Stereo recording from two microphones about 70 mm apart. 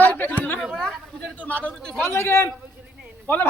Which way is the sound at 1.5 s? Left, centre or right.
Left.